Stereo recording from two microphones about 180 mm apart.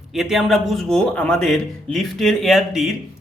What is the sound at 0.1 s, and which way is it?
A man's voice, centre (ahead or behind).